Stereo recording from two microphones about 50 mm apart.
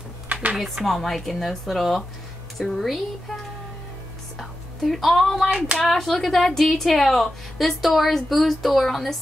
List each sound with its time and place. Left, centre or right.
0.3 s a sound: right
0.8 s speech: centre
4.4 s a woman's voice: centre